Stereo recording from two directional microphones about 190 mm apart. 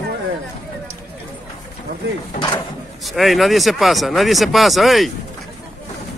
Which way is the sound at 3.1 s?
Centre (ahead or behind).